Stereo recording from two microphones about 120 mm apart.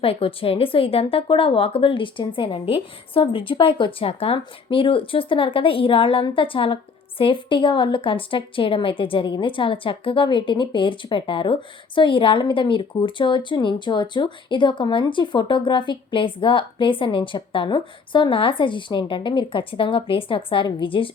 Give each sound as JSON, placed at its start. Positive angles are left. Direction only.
{"t": 0.0, "sound": "speech", "side_deg": 50}